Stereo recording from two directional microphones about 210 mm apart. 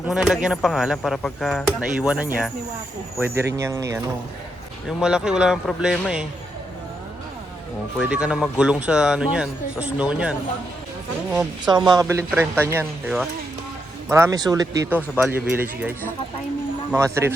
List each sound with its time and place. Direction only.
0.1 s speech: centre (ahead or behind)
4.9 s speech: 5° right (ahead or behind)
7.9 s speech: 5° right (ahead or behind)
11.6 s speech: 20° right (ahead or behind)
14.1 s speech: 15° right (ahead or behind)